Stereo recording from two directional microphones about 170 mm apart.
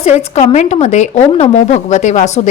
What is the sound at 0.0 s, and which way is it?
A woman's voice, 40° left (ahead or behind).